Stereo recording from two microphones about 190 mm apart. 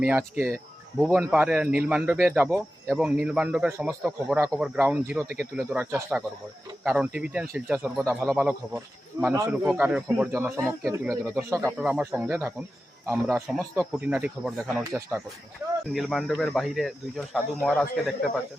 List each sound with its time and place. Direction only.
0.0 s speech: 10° right (ahead or behind)
0.9 s speech: centre (ahead or behind)
9.3 s speech: 15° right (ahead or behind)
9.6 s speech: 5° right (ahead or behind)
15.9 s speech: centre (ahead or behind)